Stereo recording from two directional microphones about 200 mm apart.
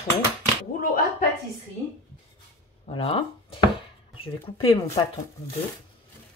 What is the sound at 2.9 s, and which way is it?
Speech, 25° left (ahead or behind).